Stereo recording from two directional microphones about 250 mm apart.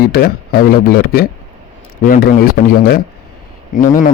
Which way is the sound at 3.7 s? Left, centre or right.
Left.